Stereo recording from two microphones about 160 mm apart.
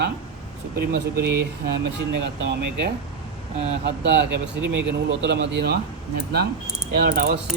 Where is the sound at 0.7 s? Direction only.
70° right (ahead or behind).